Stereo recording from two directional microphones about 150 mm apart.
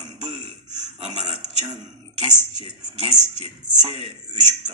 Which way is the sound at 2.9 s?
50° right (ahead or behind).